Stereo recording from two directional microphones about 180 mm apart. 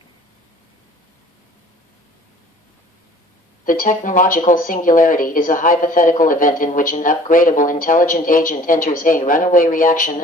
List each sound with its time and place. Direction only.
3.6 s speech: 50° left (ahead or behind)